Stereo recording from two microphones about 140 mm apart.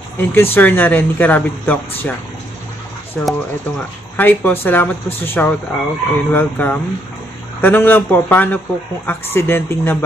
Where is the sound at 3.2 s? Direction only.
10° left (ahead or behind).